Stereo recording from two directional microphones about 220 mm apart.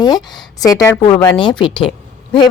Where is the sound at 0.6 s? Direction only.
15° left (ahead or behind).